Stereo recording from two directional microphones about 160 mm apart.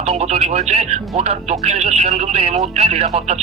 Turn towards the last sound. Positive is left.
turn(degrees=-40)  # may be behind; listen again after turning